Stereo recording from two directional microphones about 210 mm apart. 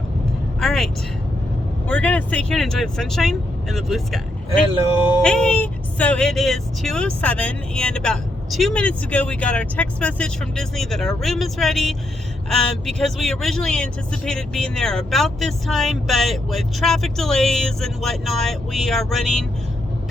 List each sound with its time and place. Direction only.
0.6 s vehicle: centre (ahead or behind)
1.9 s speech: 5° left (ahead or behind)
5.2 s speech: 5° left (ahead or behind)